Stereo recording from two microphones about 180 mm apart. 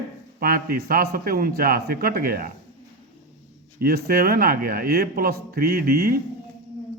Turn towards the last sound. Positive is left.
turn(degrees=-60)  # may be behind; listen again after turning